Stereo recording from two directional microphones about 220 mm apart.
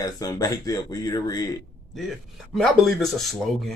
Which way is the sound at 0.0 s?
15° left (ahead or behind).